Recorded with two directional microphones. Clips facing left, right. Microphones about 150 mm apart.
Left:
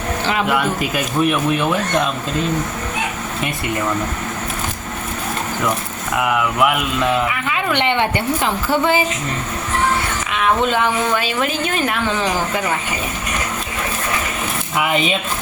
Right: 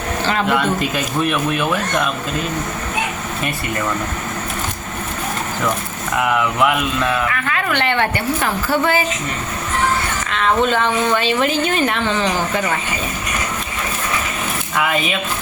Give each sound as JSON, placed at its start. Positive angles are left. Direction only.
{"t": 0.3, "sound": "a woman's voice", "side_deg": 5}
{"t": 6.1, "sound": "speech", "side_deg": 0}
{"t": 7.0, "sound": "a woman's voice", "side_deg": 15}
{"t": 10.3, "sound": "a woman's voice", "side_deg": 10}
{"t": 14.8, "sound": "speech", "side_deg": 20}